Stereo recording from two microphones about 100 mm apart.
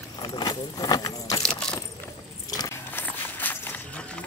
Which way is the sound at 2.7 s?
20° left (ahead or behind).